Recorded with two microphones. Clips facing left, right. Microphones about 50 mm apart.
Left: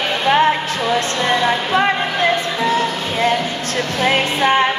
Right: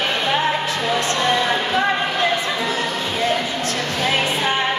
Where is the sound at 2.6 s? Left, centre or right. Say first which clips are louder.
Left 4 dB; left.